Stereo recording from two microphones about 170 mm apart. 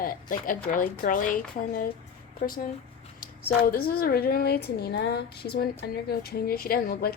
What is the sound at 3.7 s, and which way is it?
A woman's voice, 60° left (ahead or behind).